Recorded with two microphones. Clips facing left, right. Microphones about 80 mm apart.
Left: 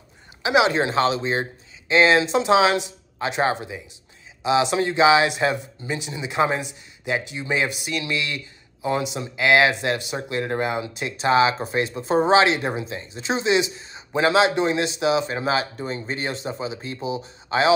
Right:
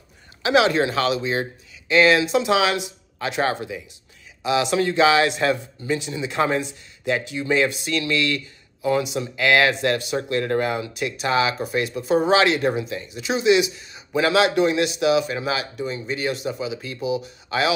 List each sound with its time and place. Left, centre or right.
0.4 s speech: centre